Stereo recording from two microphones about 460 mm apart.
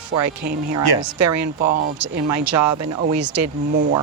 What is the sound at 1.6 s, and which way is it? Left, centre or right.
Speech, centre.